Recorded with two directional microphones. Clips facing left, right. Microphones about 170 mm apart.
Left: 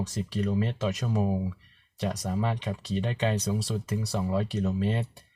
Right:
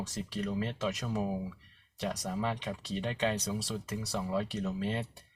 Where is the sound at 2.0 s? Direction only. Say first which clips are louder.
Left 4 dB; 20° left (ahead or behind).